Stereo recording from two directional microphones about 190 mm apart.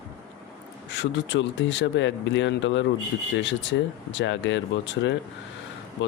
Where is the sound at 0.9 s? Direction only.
70° left (ahead or behind).